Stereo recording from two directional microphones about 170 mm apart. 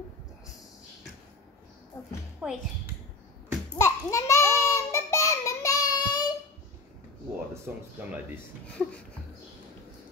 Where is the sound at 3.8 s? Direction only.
20° left (ahead or behind).